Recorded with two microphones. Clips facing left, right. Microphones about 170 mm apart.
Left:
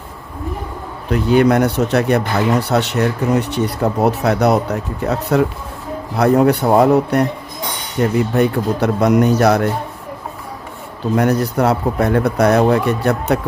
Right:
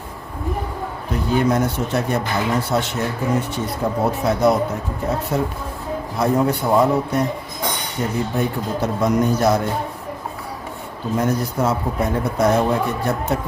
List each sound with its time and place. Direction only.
1.1 s speech: 70° left (ahead or behind)
11.2 s speech: 70° left (ahead or behind)